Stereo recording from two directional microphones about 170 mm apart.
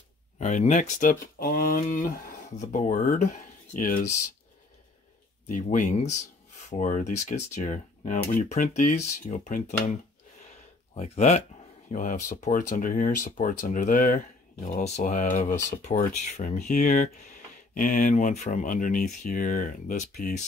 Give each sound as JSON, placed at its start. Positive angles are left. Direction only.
{"t": 0.4, "sound": "speech", "side_deg": 45}
{"t": 5.5, "sound": "speech", "side_deg": 50}
{"t": 11.0, "sound": "speech", "side_deg": 45}